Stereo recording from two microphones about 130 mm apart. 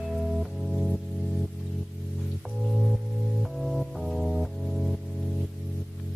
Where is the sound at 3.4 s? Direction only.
Centre (ahead or behind).